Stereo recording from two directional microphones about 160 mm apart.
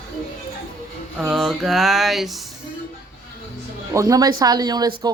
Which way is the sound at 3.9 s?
20° right (ahead or behind).